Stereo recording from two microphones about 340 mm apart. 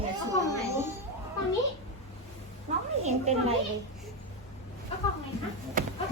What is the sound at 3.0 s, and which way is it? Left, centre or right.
Speech, centre.